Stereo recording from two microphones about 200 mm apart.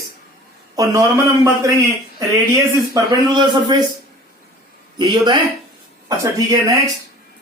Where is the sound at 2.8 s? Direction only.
20° right (ahead or behind).